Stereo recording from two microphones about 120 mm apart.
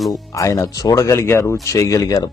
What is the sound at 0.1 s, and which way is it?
Speech, 25° left (ahead or behind).